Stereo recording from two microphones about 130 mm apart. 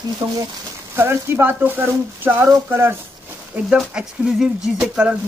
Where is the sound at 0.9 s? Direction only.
20° right (ahead or behind).